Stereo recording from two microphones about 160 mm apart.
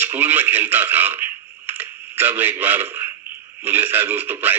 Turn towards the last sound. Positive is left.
turn(degrees=-10)  # may be behind; listen again after turning